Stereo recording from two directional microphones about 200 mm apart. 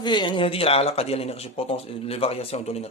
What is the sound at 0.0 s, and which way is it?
Speech, 25° left (ahead or behind).